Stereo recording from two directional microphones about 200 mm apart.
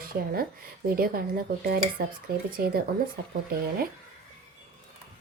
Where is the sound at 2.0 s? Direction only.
45° right (ahead or behind).